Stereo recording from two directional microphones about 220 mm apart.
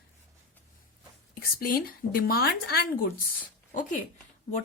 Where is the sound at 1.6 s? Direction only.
40° left (ahead or behind).